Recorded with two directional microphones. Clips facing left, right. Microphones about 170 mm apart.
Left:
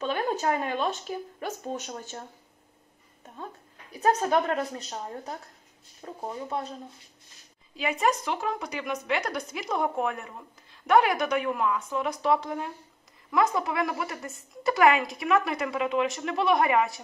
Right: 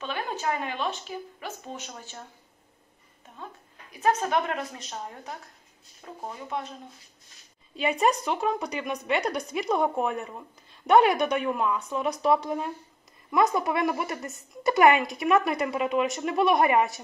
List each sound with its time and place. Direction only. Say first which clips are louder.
0.0 s a woman's voice: left 4 dB; 40° left (ahead or behind)
3.9 s a woman's voice: left 1 dB; 35° left (ahead or behind)
7.7 s a woman's voice: right 2 dB; 25° right (ahead or behind)